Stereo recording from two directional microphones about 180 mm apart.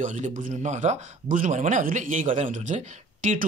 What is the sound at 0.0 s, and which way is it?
Speech, 45° right (ahead or behind).